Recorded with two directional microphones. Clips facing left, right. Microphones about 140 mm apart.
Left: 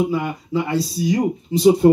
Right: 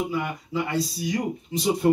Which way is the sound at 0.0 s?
30° left (ahead or behind).